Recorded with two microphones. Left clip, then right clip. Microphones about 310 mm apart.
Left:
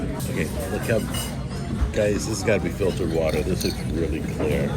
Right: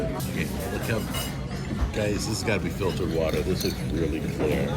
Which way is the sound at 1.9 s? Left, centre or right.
Centre.